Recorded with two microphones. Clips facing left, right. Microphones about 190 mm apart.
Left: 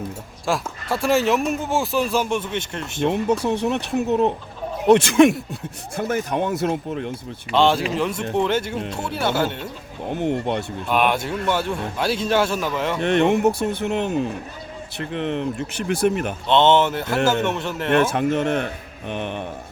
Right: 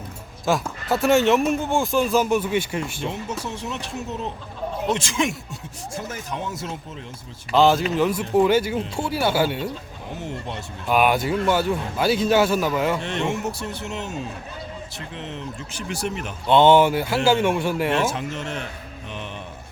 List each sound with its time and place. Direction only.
0.4 s speech: centre (ahead or behind)
3.0 s speech: 60° left (ahead or behind)
7.5 s speech: centre (ahead or behind)
10.2 s speech: 60° left (ahead or behind)
10.8 s speech: 5° right (ahead or behind)
13.0 s speech: 60° left (ahead or behind)
16.5 s speech: 10° right (ahead or behind)
17.9 s speech: 55° left (ahead or behind)